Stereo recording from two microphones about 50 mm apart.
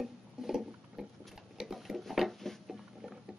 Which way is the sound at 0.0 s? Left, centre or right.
Centre.